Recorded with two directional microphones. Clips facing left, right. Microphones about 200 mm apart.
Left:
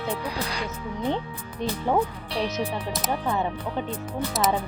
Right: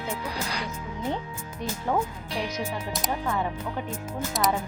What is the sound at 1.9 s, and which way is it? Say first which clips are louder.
Speech: left 3 dB; 25° left (ahead or behind).